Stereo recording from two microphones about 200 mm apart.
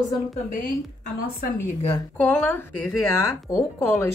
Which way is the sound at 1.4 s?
30° left (ahead or behind).